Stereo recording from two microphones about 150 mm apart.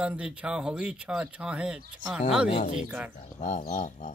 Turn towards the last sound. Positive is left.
turn(degrees=65)  # may be behind; listen again after turning